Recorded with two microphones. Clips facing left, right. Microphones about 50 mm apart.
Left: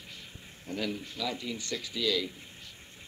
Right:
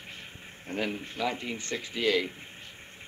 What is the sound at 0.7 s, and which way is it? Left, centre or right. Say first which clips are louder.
Speech: right 2 dB; right.